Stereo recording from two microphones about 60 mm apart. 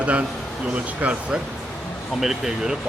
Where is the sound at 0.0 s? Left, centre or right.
Right.